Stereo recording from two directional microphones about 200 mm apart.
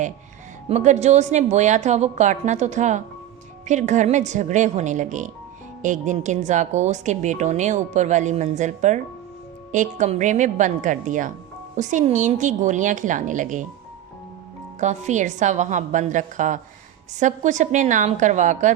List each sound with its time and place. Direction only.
0.7 s speech: 35° right (ahead or behind)
14.8 s speech: 35° right (ahead or behind)